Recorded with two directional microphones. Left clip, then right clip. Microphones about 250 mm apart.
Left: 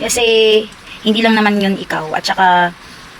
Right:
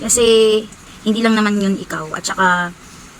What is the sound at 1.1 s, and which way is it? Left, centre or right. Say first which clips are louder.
Speech: left 4 dB; centre.